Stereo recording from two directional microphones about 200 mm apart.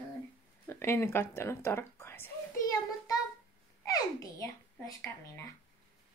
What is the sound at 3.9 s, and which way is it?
A child's voice, 15° left (ahead or behind).